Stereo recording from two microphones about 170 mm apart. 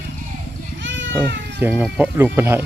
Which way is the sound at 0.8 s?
90° right.